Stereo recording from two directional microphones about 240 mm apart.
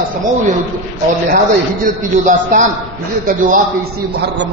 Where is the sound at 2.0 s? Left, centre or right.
Right.